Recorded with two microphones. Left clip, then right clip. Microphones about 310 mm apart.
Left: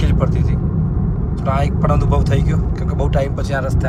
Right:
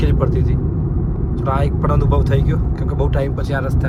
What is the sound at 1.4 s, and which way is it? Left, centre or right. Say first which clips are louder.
Speech: left 1 dB; centre.